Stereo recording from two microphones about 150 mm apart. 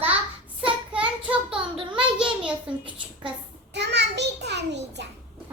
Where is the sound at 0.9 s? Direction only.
10° right (ahead or behind).